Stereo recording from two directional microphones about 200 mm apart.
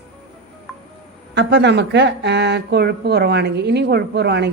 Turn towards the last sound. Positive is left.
turn(degrees=-55)  # may be behind; listen again after turning